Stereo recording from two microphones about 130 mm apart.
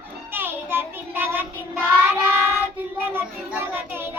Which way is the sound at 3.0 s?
15° right (ahead or behind).